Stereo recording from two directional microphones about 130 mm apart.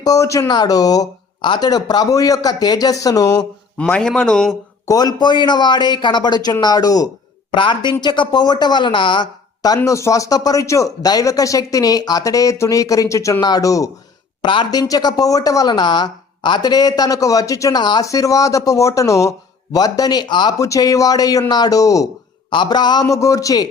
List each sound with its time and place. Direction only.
0.0 s speech: 25° left (ahead or behind)
3.8 s a man's voice: 10° left (ahead or behind)
4.9 s speech: 30° left (ahead or behind)
14.4 s speech: 35° left (ahead or behind)